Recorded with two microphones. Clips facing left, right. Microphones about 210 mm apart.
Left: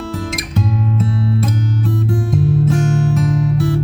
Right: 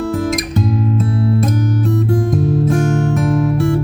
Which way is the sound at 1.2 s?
50° right (ahead or behind).